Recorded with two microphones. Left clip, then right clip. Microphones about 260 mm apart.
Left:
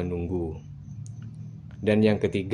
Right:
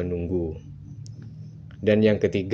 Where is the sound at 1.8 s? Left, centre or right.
Centre.